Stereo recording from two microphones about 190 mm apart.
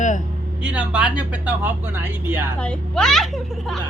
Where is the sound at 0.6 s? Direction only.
5° right (ahead or behind).